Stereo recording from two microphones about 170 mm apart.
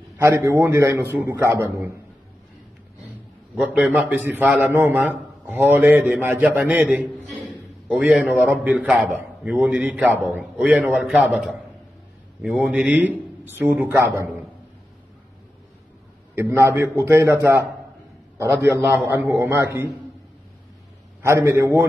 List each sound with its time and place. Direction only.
0.2 s a man's voice: 15° right (ahead or behind)
3.5 s a man's voice: 5° right (ahead or behind)
16.3 s a man's voice: 15° right (ahead or behind)
21.2 s a man's voice: 15° right (ahead or behind)